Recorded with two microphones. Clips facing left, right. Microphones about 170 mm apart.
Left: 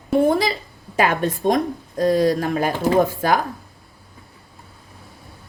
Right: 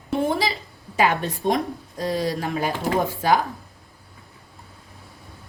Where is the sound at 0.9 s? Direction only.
50° left (ahead or behind).